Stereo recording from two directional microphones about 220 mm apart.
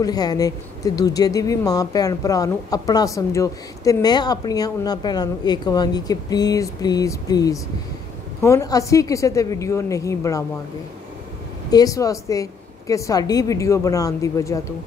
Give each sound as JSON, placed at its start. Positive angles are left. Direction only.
{"t": 0.0, "sound": "speech", "side_deg": 15}
{"t": 11.7, "sound": "speech", "side_deg": 15}